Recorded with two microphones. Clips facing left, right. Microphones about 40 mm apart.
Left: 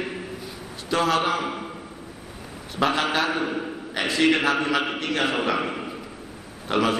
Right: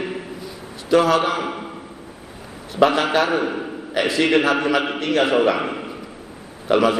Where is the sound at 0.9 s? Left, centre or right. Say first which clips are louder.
Right 6 dB; centre.